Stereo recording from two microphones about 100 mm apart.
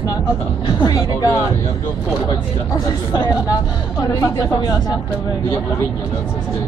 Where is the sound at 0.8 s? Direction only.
40° left (ahead or behind).